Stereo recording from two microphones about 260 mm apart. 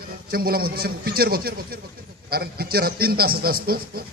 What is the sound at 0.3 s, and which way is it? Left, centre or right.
A man's voice, right.